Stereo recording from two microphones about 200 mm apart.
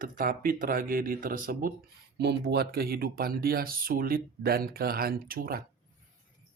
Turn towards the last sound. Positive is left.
turn(degrees=-45)  # may be behind; listen again after turning